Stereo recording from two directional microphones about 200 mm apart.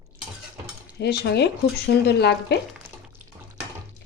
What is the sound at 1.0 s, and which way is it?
Speech, 55° left (ahead or behind).